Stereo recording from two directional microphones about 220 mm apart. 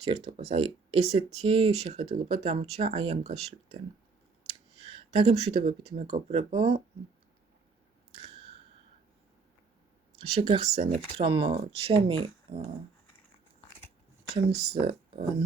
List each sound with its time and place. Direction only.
0.0 s speech: 25° right (ahead or behind)
4.9 s speech: 25° right (ahead or behind)
10.2 s speech: 25° right (ahead or behind)
12.5 s dog: 25° right (ahead or behind)
14.5 s speech: 45° right (ahead or behind)
14.8 s speech: 25° right (ahead or behind)